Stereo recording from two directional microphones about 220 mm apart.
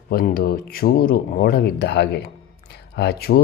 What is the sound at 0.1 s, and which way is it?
Speech, 45° left (ahead or behind).